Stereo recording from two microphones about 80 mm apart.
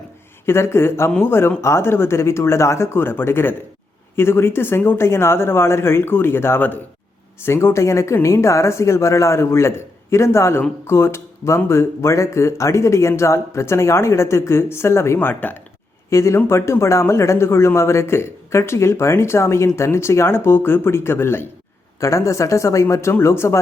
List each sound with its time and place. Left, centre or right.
0.4 s speech: left
16.0 s speech: left